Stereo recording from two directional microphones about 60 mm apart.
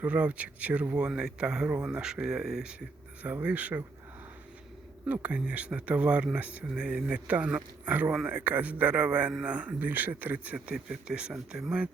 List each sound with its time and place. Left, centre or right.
0.0 s speech: right
1.6 s speech: right
1.9 s speech: centre
3.4 s speech: right
5.0 s speech: right